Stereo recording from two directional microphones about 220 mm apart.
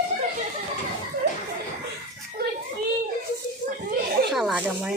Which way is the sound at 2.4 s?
45° right (ahead or behind).